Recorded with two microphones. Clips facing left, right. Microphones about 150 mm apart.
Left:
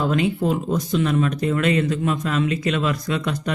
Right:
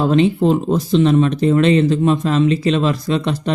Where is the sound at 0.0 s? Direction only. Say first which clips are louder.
Right 7 dB; 30° right (ahead or behind).